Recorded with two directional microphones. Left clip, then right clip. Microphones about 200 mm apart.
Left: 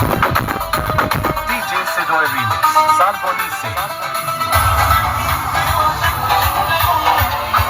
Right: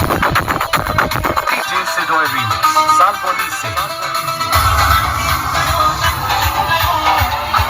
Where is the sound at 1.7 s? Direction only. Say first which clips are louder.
Left 1 dB; 45° left (ahead or behind).